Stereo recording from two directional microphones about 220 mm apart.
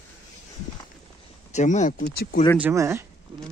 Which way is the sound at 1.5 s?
35° left (ahead or behind).